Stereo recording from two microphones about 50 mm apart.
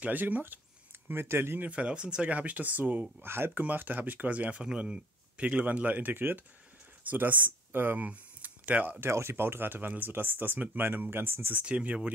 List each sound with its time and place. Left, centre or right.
0.0 s speech: right
1.1 s speech: right
1.6 s speech: right
2.2 s speech: right
3.2 s speech: right
3.5 s speech: right
4.6 s speech: centre; by 8.0 s right
8.0 s a sound: right
9.1 s speech: right
11.1 s speech: right
11.6 s speech: right